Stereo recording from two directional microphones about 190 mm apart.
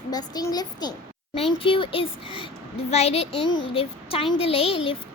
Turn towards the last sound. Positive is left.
turn(degrees=30)  # may be behind; listen again after turning